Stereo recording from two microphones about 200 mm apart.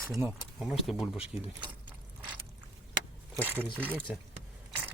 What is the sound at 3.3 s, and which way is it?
Speech, 10° right (ahead or behind).